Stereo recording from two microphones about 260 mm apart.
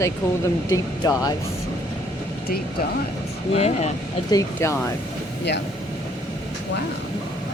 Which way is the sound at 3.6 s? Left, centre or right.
Left.